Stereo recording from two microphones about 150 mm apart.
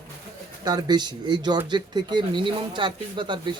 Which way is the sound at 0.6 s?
30° right (ahead or behind).